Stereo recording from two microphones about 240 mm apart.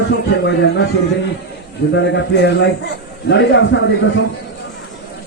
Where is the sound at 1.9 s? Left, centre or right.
Left.